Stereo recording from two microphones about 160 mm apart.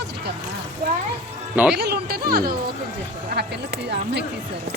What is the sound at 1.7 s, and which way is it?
Speech, 90° right.